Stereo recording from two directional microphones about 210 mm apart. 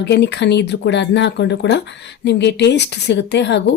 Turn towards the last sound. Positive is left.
turn(degrees=55)  # may be behind; listen again after turning